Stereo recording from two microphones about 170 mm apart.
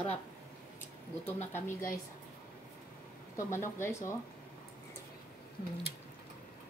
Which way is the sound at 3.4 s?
15° left (ahead or behind).